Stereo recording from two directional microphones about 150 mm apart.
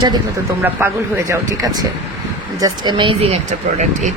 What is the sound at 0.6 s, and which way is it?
Speech, 15° right (ahead or behind).